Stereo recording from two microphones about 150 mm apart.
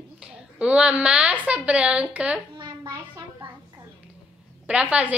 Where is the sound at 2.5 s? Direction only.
30° right (ahead or behind).